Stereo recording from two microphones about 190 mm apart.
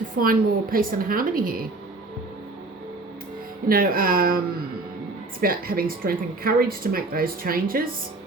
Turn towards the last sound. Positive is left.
turn(degrees=-50)  # may be behind; listen again after turning